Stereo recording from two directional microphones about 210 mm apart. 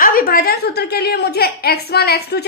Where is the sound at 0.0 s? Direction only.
45° left (ahead or behind).